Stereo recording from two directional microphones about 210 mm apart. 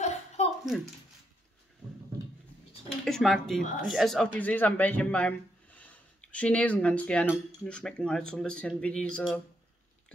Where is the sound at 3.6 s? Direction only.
40° left (ahead or behind).